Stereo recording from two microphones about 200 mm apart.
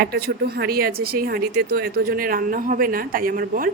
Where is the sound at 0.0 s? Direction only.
50° right (ahead or behind).